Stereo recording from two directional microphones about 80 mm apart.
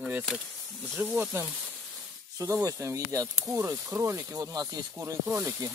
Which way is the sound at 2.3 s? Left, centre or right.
Right.